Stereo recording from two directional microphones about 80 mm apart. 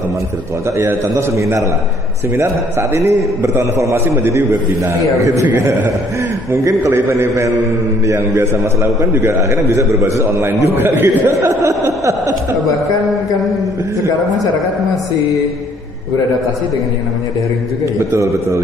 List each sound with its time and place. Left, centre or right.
0.7 s a man's voice: right
10.8 s speech: right
11.3 s a sound: right
18.1 s a man's voice: right